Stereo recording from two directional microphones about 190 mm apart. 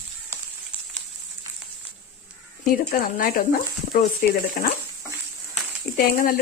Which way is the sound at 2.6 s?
45° left (ahead or behind).